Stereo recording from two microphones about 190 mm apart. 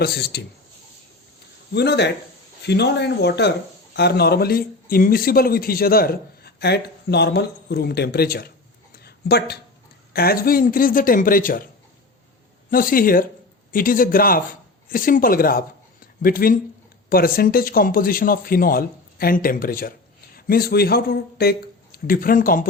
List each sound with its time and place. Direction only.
0.0 s speech: 55° left (ahead or behind)
1.7 s speech: 60° left (ahead or behind)
9.0 s a sound: 60° left (ahead or behind)
10.1 s speech: 55° left (ahead or behind)
12.7 s speech: 50° left (ahead or behind)